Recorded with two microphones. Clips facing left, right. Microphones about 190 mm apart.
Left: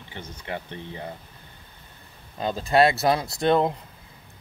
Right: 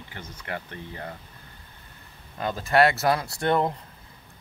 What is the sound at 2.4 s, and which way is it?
Speech, 25° left (ahead or behind).